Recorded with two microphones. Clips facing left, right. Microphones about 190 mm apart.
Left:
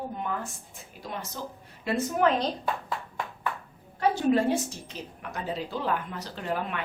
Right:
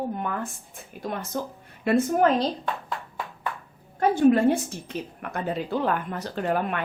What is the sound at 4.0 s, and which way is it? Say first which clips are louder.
Speech: right 5 dB; 55° right (ahead or behind).